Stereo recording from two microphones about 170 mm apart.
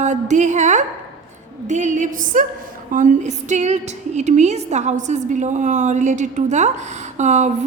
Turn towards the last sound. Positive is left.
turn(degrees=-45)  # may be behind; listen again after turning